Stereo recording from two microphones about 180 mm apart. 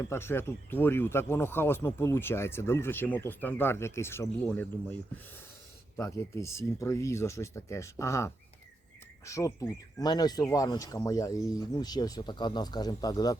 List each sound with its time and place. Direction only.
0.0 s speech: 15° left (ahead or behind)